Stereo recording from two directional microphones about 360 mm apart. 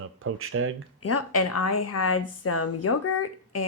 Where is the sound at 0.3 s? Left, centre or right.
Right.